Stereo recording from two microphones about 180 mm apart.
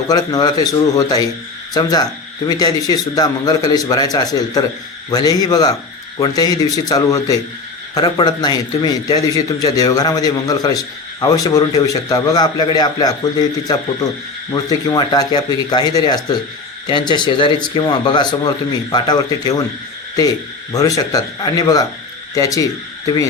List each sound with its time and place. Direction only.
0.1 s a man's voice: 20° left (ahead or behind)
20.7 s a man's voice: 20° left (ahead or behind)